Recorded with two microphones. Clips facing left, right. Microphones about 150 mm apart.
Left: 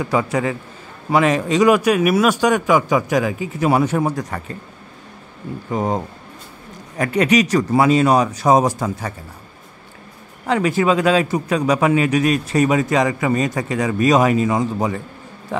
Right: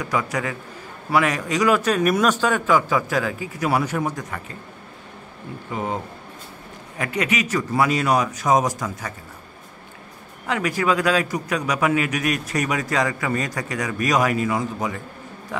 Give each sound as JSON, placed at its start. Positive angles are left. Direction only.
{"t": 0.0, "sound": "a man's voice", "side_deg": 30}
{"t": 1.8, "sound": "a man's voice", "side_deg": 10}
{"t": 5.7, "sound": "a man's voice", "side_deg": 40}
{"t": 10.4, "sound": "a man's voice", "side_deg": 30}